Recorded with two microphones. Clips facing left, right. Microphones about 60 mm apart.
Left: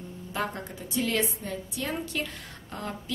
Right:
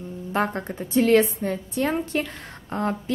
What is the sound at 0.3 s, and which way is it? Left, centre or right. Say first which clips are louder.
A woman's voice: right 7 dB; right.